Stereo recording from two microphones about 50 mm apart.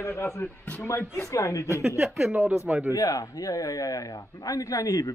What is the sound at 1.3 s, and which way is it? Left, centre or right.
Speech, left.